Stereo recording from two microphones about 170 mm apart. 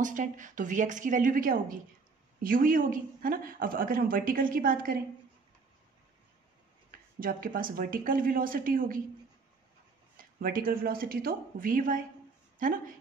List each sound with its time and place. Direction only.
0.0 s a woman's voice: 50° right (ahead or behind)
7.2 s a woman's voice: 55° right (ahead or behind)
10.1 s a woman's voice: 55° right (ahead or behind)